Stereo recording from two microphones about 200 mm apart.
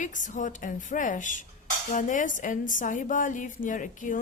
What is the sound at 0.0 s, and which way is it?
A woman's voice, 40° left (ahead or behind).